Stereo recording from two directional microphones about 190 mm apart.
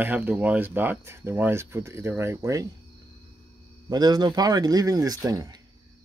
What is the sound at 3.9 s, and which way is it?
Speech, 20° right (ahead or behind).